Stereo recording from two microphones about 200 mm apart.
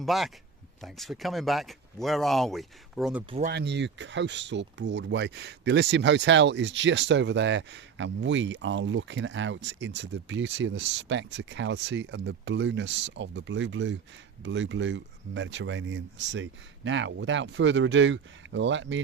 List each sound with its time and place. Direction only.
0.0 s speech: centre (ahead or behind)
3.5 s speech: 55° right (ahead or behind)